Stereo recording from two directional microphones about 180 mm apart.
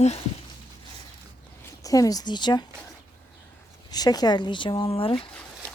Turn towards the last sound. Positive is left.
turn(degrees=30)  # may be behind; listen again after turning